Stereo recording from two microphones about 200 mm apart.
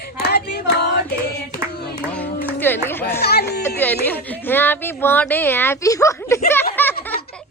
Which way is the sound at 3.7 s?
10° left (ahead or behind).